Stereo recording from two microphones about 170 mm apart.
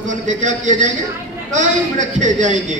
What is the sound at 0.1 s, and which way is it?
A man's voice, 45° right (ahead or behind).